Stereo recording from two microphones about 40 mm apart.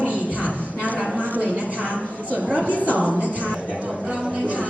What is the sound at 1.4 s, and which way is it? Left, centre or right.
A woman's voice, right.